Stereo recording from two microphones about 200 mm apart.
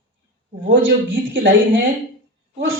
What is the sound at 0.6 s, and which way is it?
A woman's voice, 65° right (ahead or behind).